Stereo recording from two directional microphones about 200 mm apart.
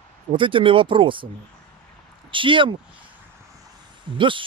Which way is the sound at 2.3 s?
25° right (ahead or behind).